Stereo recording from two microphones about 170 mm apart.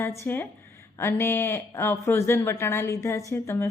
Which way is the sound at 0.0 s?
15° left (ahead or behind).